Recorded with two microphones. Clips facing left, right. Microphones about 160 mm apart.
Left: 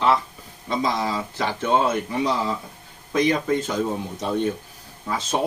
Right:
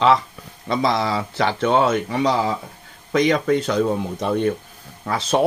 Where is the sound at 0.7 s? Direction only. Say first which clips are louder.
Right 4 dB; 75° right (ahead or behind).